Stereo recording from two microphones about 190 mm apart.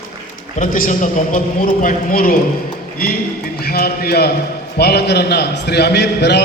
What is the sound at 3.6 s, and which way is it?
A man's voice, 55° left (ahead or behind).